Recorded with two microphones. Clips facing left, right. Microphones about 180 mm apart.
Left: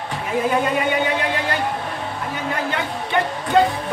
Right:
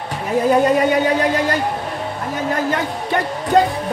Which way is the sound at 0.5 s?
40° right (ahead or behind).